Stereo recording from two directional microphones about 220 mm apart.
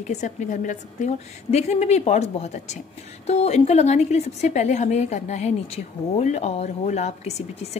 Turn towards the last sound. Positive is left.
turn(degrees=30)  # may be behind; listen again after turning